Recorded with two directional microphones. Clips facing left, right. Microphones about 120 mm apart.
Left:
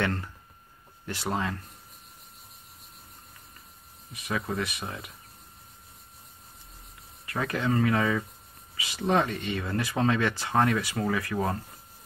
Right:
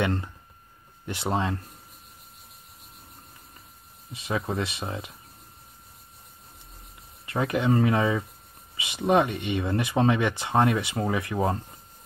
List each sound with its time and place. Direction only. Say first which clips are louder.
0.0 s speech: right 3 dB; 20° right (ahead or behind)
4.1 s speech: right 2 dB; 25° right (ahead or behind)
7.2 s speech: right 4 dB; 20° right (ahead or behind)